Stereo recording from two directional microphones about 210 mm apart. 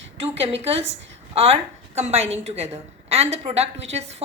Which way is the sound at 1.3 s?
30° right (ahead or behind).